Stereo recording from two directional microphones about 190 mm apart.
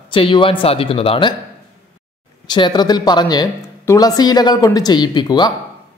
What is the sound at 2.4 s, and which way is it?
A man's voice, 25° left (ahead or behind).